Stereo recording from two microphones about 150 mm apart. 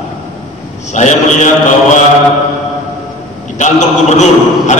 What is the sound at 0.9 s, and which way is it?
Speech, 50° left (ahead or behind).